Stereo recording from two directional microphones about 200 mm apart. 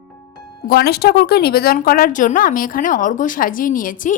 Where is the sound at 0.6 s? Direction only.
50° left (ahead or behind).